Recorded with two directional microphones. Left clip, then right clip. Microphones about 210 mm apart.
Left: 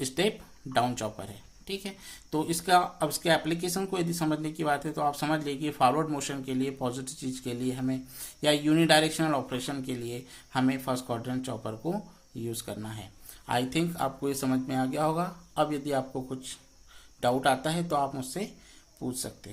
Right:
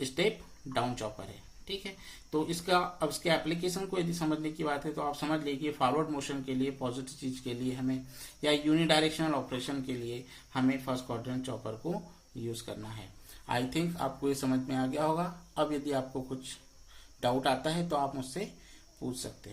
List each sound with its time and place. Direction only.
0.0 s speech: 40° left (ahead or behind)